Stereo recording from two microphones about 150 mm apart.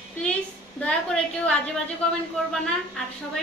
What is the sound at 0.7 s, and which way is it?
A woman's voice, 5° left (ahead or behind).